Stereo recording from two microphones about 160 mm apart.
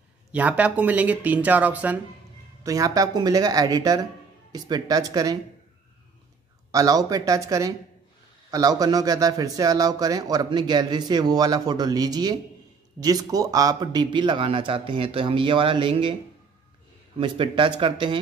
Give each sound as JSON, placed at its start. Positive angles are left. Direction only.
{"t": 0.3, "sound": "speech", "side_deg": -10}
{"t": 2.6, "sound": "a man's voice", "side_deg": -20}
{"t": 6.7, "sound": "a man's voice", "side_deg": -20}
{"t": 17.2, "sound": "speech", "side_deg": -30}